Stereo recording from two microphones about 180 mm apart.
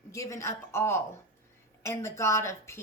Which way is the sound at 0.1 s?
15° left (ahead or behind).